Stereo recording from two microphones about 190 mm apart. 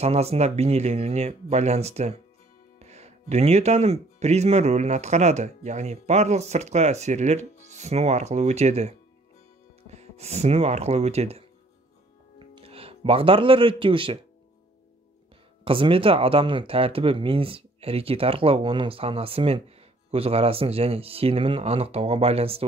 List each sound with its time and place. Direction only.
0.0 s speech: 35° right (ahead or behind)
12.6 s speech: 30° right (ahead or behind)
15.6 s speech: 30° right (ahead or behind)